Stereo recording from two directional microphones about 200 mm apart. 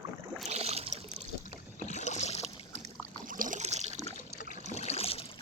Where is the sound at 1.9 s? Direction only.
35° left (ahead or behind).